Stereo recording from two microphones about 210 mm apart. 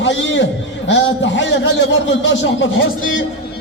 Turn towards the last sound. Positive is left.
turn(degrees=70)  # may be behind; listen again after turning